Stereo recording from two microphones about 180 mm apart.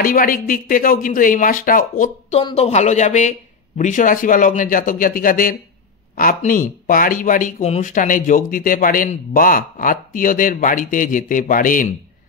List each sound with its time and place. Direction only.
0.0 s a man's voice: 50° left (ahead or behind)
2.3 s a man's voice: 35° left (ahead or behind)